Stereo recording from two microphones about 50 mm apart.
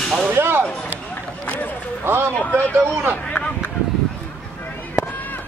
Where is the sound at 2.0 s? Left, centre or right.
Right.